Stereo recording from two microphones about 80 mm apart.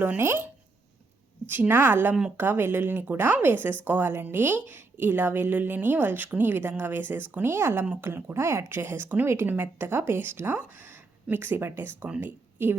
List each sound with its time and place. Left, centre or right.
0.0 s a woman's voice: right
1.5 s a woman's voice: right
11.9 s speech: centre
12.2 s speech: right